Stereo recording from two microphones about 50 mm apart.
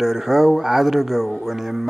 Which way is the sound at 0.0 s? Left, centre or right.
Centre.